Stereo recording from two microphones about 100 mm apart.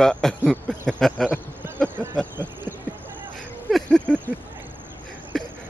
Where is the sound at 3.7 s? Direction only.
5° left (ahead or behind).